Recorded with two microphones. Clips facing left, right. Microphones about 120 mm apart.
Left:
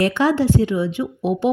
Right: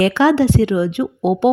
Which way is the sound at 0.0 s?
90° right.